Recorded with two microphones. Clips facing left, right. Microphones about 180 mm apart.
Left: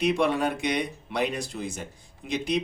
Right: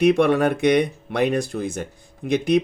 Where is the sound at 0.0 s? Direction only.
60° right (ahead or behind).